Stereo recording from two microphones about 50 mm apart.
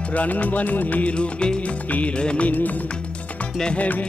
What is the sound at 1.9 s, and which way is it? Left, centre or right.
Music of bollywood, left.